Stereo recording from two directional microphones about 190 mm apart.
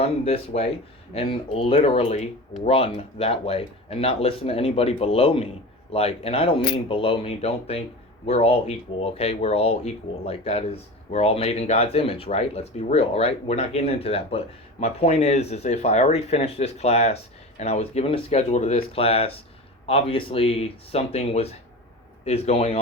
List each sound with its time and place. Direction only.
0.0 s speech: 35° left (ahead or behind)